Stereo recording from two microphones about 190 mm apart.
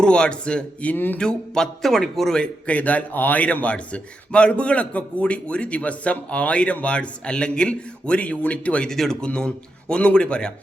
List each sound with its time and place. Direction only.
0.0 s a man's voice: 5° left (ahead or behind)